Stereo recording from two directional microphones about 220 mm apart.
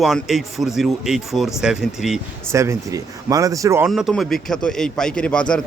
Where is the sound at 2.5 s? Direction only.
15° right (ahead or behind).